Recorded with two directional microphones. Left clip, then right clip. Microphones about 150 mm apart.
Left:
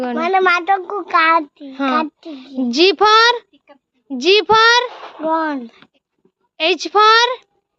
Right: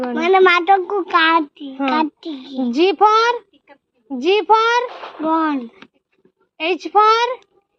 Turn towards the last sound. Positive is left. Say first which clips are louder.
# left 2 dB
turn(degrees=40)  # may be behind; listen again after turning